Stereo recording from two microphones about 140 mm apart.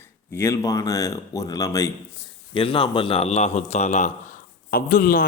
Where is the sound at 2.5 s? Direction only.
35° left (ahead or behind); by 4.1 s 55° left (ahead or behind).